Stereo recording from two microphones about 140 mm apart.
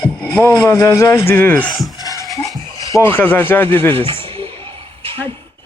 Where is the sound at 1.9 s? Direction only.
30° left (ahead or behind).